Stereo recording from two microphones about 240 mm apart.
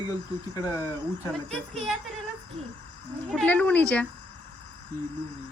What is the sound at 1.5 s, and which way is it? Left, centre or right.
Speech, centre.